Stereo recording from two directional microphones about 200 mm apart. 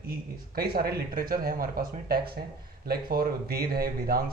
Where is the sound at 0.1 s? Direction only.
50° right (ahead or behind).